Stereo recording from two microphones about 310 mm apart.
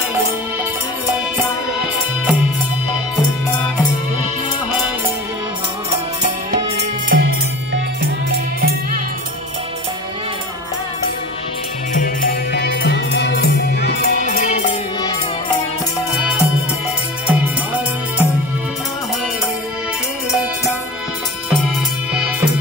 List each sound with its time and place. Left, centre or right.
6.2 s music: right
7.2 s music: right
12.0 s music: left
17.3 s music: centre